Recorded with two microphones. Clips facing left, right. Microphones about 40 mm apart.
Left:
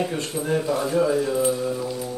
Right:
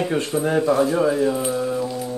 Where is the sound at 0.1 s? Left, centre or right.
Right.